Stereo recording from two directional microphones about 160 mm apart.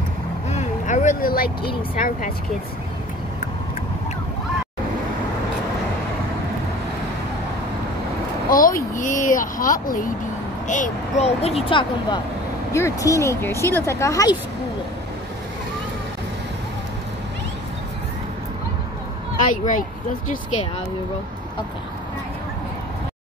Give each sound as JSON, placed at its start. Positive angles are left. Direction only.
{"t": 0.5, "sound": "vehicle", "side_deg": 45}
{"t": 2.0, "sound": "speech", "side_deg": 60}
{"t": 8.5, "sound": "speech", "side_deg": 60}
{"t": 10.7, "sound": "speech", "side_deg": 45}
{"t": 12.7, "sound": "speech", "side_deg": 20}
{"t": 19.4, "sound": "speech", "side_deg": 55}